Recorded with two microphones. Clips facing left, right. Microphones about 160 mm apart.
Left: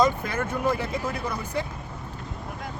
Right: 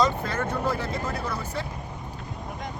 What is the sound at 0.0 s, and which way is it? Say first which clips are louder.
Speech: left 1 dB; 10° left (ahead or behind).